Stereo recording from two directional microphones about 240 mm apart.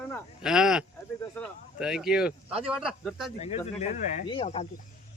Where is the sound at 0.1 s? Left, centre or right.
Centre.